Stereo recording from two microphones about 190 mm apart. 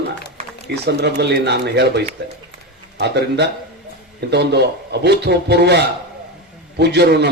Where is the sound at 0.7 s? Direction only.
60° right (ahead or behind).